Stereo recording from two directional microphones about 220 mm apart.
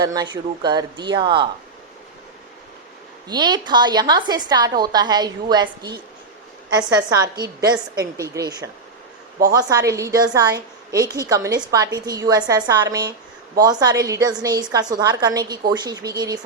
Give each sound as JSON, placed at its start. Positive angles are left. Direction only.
{"t": 0.0, "sound": "a woman's voice", "side_deg": -15}
{"t": 3.2, "sound": "a woman's voice", "side_deg": -20}